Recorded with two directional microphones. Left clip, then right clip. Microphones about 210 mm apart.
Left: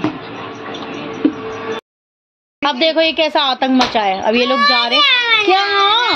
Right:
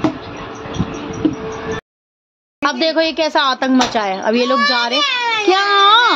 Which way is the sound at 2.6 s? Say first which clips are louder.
Left 2 dB; centre (ahead or behind).